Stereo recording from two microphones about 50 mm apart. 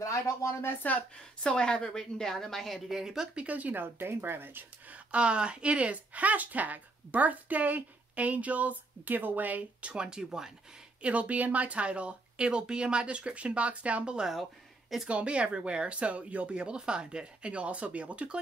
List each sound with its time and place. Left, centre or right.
0.0 s speech: left
1.1 s a woman's voice: centre
3.0 s speech: centre
3.4 s a woman's voice: right
4.9 s speech: right
11.0 s speech: right